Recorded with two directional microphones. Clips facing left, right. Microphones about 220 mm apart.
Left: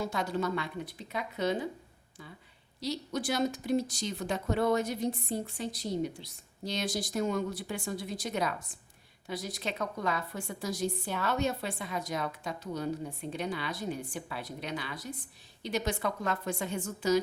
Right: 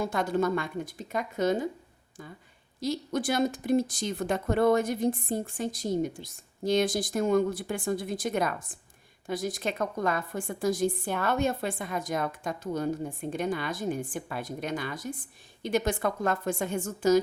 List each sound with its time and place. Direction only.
0.0 s a woman's voice: 50° right (ahead or behind)
2.8 s a woman's voice: 50° right (ahead or behind)